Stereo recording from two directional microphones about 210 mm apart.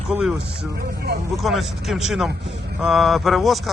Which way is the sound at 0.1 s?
5° right (ahead or behind).